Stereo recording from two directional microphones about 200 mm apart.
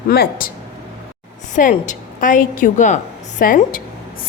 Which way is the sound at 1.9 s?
40° left (ahead or behind).